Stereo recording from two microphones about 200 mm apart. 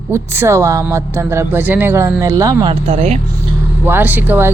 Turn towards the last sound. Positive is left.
turn(degrees=-10)  # may be behind; listen again after turning